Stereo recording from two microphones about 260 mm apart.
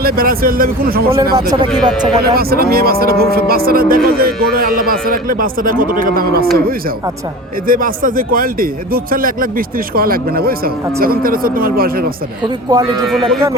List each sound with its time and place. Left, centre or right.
0.0 s speech: right
1.2 s a man's voice: centre
2.0 s speech: right
7.7 s speech: right
12.7 s a man's voice: centre
13.1 s speech: centre